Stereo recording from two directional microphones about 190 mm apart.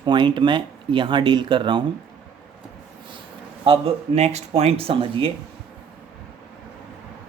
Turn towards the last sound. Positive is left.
turn(degrees=-30)  # may be behind; listen again after turning